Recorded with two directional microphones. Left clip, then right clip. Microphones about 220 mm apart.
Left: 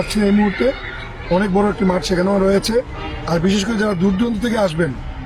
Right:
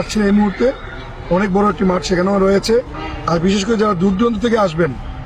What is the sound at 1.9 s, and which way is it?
Speech, 20° right (ahead or behind).